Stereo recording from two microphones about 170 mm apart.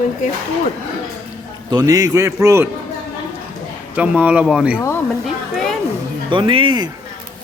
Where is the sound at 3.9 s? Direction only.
10° right (ahead or behind).